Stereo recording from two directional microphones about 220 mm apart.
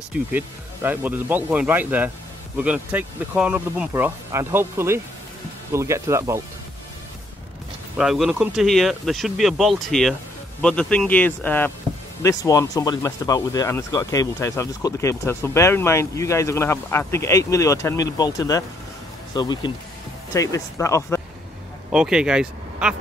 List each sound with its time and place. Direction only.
0.3 s speech: 10° right (ahead or behind)
8.0 s speech: centre (ahead or behind)
21.9 s speech: 5° right (ahead or behind)